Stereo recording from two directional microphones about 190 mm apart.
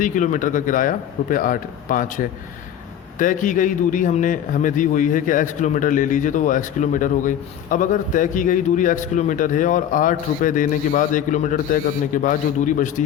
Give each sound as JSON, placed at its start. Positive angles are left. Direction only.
{"t": 0.0, "sound": "a man's voice", "side_deg": 40}